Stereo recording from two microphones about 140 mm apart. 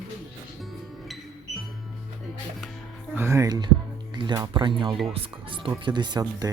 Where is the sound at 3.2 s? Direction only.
15° right (ahead or behind).